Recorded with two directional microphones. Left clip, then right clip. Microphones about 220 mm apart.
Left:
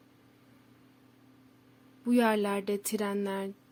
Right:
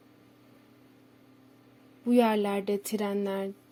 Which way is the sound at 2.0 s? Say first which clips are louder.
Right 2 dB; centre (ahead or behind).